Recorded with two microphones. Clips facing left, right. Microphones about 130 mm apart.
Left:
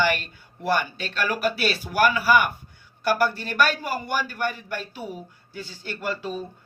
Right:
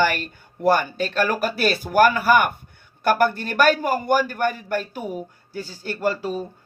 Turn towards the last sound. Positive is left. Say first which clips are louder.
# right 6 dB
turn(degrees=-40)  # may be behind; listen again after turning